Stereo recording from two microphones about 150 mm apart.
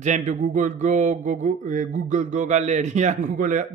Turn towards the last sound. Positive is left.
turn(degrees=-55)  # may be behind; listen again after turning